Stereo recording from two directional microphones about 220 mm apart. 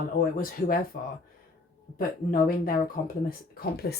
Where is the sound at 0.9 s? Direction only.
45° left (ahead or behind).